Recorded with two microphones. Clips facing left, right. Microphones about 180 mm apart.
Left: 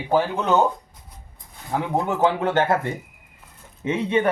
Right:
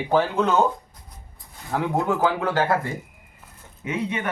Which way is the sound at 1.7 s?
20° left (ahead or behind).